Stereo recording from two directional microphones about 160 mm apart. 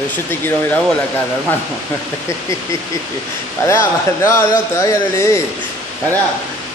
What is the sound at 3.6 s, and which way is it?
Speech, 15° left (ahead or behind).